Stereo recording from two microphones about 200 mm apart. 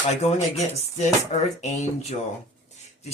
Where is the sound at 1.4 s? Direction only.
30° left (ahead or behind).